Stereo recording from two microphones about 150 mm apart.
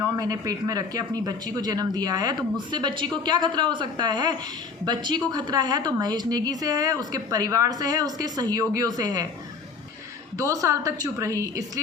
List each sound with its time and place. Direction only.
0.0 s speech: 25° right (ahead or behind)
10.3 s speech: 25° right (ahead or behind)